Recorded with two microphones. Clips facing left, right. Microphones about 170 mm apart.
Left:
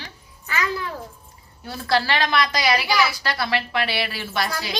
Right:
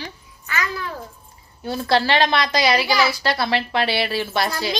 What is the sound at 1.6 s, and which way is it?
A woman's voice, 25° right (ahead or behind).